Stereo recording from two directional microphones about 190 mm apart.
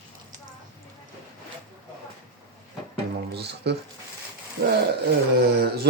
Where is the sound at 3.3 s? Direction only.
60° right (ahead or behind).